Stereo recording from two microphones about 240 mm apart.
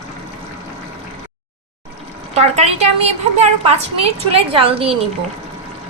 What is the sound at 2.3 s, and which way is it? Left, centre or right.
A woman's voice, right.